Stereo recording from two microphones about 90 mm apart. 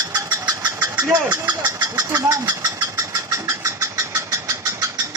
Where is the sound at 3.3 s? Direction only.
35° right (ahead or behind).